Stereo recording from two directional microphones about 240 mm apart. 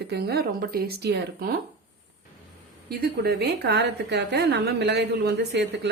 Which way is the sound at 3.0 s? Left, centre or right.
Right.